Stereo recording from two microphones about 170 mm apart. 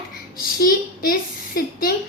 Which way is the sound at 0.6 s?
55° left (ahead or behind).